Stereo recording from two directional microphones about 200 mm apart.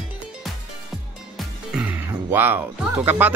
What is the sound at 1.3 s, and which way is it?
Speech, 5° right (ahead or behind).